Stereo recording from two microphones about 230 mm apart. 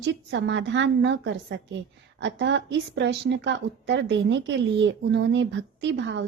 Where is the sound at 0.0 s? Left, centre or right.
Right.